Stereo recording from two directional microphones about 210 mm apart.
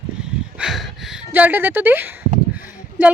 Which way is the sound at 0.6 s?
Centre (ahead or behind).